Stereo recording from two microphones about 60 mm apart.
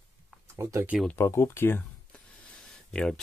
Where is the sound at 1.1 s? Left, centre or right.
Left.